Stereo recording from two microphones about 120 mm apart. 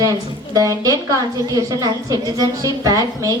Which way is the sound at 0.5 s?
30° right (ahead or behind).